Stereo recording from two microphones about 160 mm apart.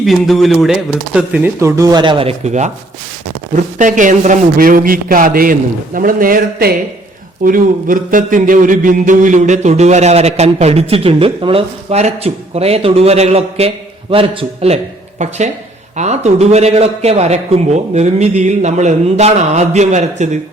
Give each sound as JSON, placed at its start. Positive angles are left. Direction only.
{"t": 0.0, "sound": "speech", "side_deg": 0}
{"t": 1.5, "sound": "speech", "side_deg": -20}
{"t": 3.8, "sound": "a man's voice", "side_deg": -55}
{"t": 15.2, "sound": "a man's voice", "side_deg": -45}